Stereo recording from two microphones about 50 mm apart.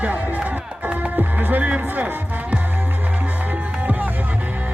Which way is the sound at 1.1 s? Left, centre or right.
Right.